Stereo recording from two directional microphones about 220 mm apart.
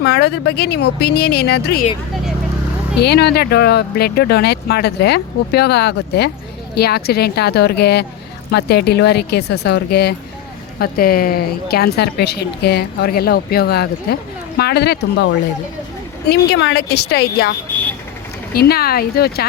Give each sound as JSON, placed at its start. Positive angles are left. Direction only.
{"t": 0.0, "sound": "a woman's voice", "side_deg": 45}
{"t": 3.0, "sound": "a woman's voice", "side_deg": 50}
{"t": 16.3, "sound": "a woman's voice", "side_deg": 50}
{"t": 18.5, "sound": "a woman's voice", "side_deg": 45}